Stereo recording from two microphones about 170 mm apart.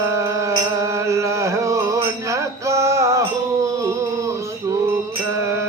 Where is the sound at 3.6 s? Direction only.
20° right (ahead or behind).